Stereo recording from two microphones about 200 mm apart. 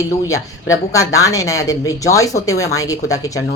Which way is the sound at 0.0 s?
15° left (ahead or behind).